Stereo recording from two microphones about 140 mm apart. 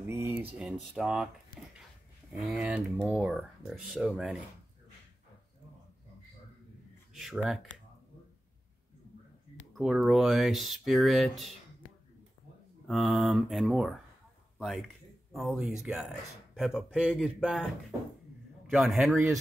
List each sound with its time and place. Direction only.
0.0 s speech: 15° right (ahead or behind)
2.3 s speech: centre (ahead or behind)
9.8 s speech: 5° right (ahead or behind)
12.8 s a man's voice: centre (ahead or behind)
18.7 s speech: centre (ahead or behind)